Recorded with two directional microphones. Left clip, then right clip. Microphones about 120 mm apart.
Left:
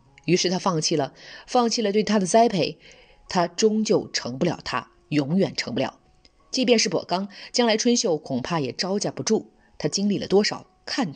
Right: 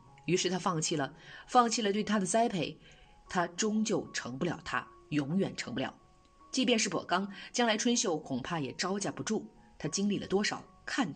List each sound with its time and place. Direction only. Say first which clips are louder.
0.2 s a woman's voice: left 9 dB; 30° left (ahead or behind)